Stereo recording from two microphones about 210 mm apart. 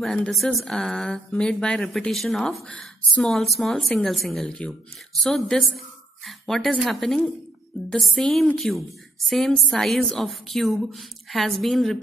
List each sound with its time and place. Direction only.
0.0 s a woman's voice: 5° left (ahead or behind)